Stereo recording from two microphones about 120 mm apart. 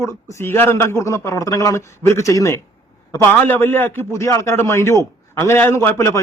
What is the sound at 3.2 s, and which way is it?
A man's voice, 15° left (ahead or behind).